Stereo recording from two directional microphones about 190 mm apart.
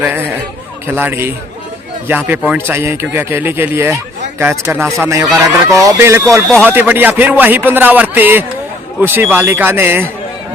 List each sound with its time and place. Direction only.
0.9 s a man's voice: 10° right (ahead or behind)